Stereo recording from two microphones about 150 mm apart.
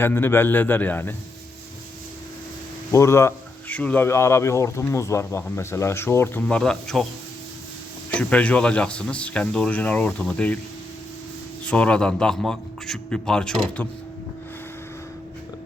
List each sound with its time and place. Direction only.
0.0 s speech: 15° left (ahead or behind)
2.9 s speech: 20° left (ahead or behind); by 7.1 s 5° left (ahead or behind)
8.1 s speech: 10° left (ahead or behind)
11.6 s a man's voice: 5° left (ahead or behind)